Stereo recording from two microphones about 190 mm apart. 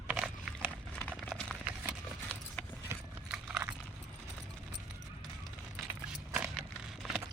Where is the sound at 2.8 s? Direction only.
10° right (ahead or behind).